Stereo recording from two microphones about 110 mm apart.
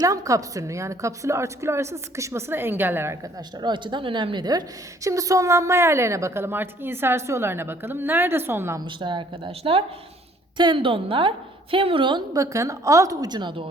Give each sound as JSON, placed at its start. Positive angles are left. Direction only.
{"t": 0.0, "sound": "a woman's voice", "side_deg": -35}
{"t": 3.6, "sound": "a woman's voice", "side_deg": -45}
{"t": 5.0, "sound": "a woman's voice", "side_deg": -30}
{"t": 8.8, "sound": "a woman's voice", "side_deg": -45}
{"t": 12.3, "sound": "a woman's voice", "side_deg": -30}